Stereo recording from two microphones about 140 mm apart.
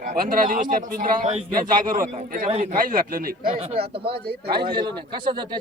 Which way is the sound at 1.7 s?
80° right.